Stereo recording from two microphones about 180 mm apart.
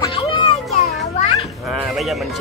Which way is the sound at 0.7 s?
35° left (ahead or behind).